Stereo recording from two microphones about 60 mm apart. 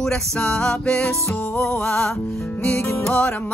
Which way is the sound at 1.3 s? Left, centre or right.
Left.